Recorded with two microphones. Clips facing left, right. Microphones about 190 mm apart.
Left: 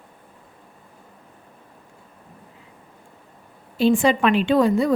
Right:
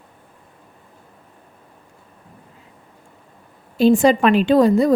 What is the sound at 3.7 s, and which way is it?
A woman's voice, 40° right (ahead or behind).